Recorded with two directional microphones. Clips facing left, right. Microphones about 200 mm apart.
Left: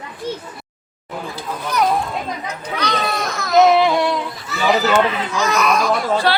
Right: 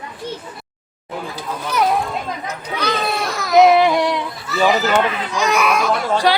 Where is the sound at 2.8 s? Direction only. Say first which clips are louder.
Right 1 dB; 5° right (ahead or behind).